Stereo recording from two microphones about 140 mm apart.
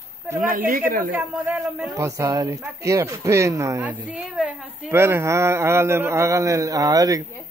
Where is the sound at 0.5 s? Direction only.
85° right.